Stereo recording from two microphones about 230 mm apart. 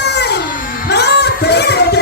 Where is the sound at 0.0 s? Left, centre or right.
Left.